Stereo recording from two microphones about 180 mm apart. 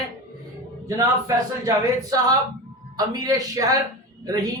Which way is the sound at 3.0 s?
20° right (ahead or behind).